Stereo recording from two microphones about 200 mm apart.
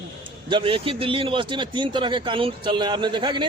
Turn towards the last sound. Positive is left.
turn(degrees=-25)  # may be behind; listen again after turning